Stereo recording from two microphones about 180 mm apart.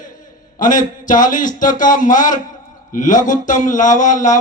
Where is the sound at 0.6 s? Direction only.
45° left (ahead or behind).